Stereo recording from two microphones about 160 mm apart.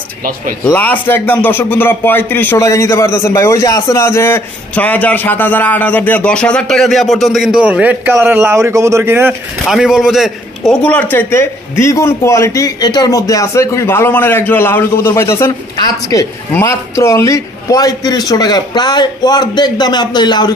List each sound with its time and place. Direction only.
0.7 s speech: 10° left (ahead or behind); by 9.3 s 15° right (ahead or behind)
9.7 s a man's voice: 5° right (ahead or behind); by 20.5 s 25° left (ahead or behind)